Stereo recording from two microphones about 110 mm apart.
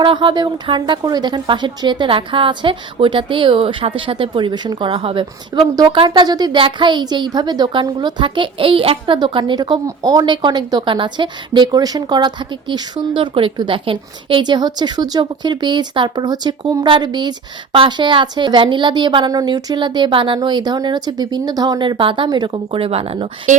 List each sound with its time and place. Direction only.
0.0 s a woman's voice: 50° right (ahead or behind)
5.7 s a woman's voice: 40° right (ahead or behind); by 9.1 s 55° right (ahead or behind)
9.1 s a woman's voice: 45° right (ahead or behind); by 23.3 s 65° right (ahead or behind)